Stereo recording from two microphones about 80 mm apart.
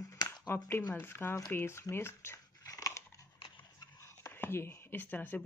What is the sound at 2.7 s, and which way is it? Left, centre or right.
Crunch, left.